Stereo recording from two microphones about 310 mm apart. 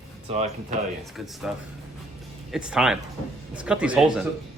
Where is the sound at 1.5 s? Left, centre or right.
Centre.